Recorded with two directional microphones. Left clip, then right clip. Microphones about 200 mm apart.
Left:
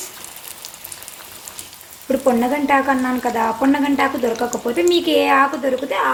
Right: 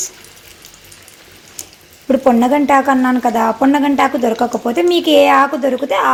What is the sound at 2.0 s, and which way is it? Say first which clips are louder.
A woman's voice: right 5 dB; 30° right (ahead or behind).